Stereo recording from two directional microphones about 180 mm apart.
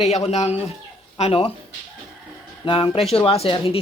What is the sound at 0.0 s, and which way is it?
Speech, 35° left (ahead or behind).